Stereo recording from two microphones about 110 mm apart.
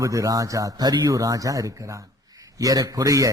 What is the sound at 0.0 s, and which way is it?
Speech, 30° right (ahead or behind).